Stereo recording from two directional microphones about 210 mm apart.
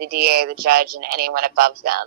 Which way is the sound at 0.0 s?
45° right (ahead or behind).